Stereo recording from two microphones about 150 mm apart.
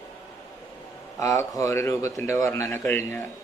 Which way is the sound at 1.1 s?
20° left (ahead or behind).